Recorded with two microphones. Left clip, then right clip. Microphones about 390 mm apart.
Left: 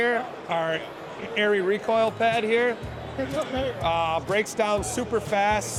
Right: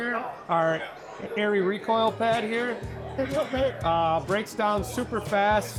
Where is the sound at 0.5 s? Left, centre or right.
Centre.